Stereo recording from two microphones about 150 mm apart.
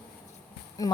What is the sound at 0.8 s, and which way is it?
Speech, 25° left (ahead or behind).